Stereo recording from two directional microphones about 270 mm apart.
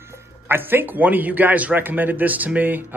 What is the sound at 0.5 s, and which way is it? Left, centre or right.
A man's voice, centre.